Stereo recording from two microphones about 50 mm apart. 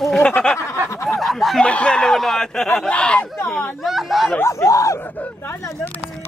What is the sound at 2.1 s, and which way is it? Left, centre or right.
Speech, centre.